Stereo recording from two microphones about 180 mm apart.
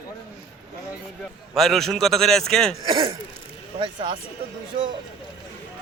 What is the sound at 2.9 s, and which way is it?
Speech, 25° right (ahead or behind).